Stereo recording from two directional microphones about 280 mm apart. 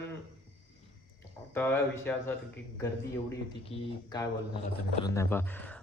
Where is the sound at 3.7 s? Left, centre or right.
Centre.